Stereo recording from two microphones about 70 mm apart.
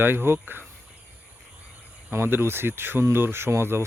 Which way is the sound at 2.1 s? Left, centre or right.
Right.